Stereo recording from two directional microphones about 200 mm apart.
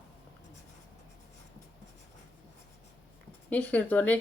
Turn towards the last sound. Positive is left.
turn(degrees=5)  # may be behind; listen again after turning